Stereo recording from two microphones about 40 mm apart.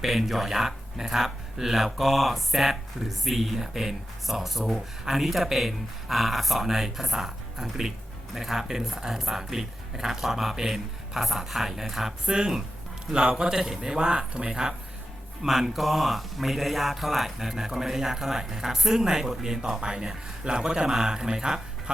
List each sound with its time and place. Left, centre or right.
0.0 s speech: centre
12.2 s speech: centre
14.0 s speech: right
15.4 s speech: centre